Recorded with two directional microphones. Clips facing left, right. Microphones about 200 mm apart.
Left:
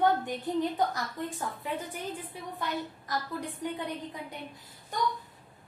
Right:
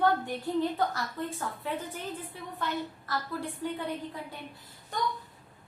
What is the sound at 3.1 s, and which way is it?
A woman's voice, 15° left (ahead or behind).